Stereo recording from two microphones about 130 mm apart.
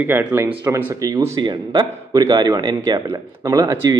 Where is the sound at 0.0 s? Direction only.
15° right (ahead or behind).